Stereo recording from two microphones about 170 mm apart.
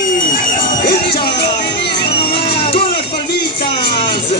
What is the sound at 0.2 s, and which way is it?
Crowd, 55° left (ahead or behind).